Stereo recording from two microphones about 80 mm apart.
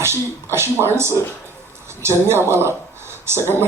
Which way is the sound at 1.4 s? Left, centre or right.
Right.